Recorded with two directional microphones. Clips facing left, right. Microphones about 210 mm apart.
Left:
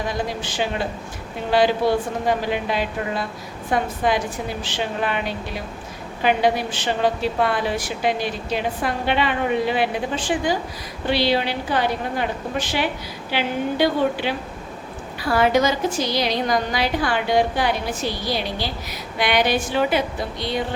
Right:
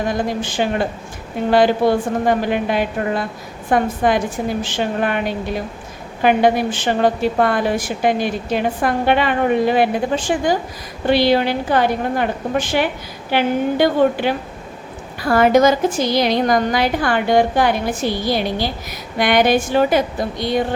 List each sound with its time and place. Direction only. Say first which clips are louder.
0.1 s a woman's voice: right 5 dB; 50° right (ahead or behind)